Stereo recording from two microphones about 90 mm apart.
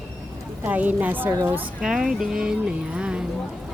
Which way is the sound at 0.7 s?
20° right (ahead or behind).